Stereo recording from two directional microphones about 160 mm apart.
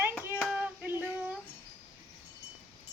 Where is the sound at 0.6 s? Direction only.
10° right (ahead or behind).